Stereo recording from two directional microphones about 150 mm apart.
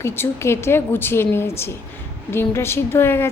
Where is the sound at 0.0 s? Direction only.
15° left (ahead or behind).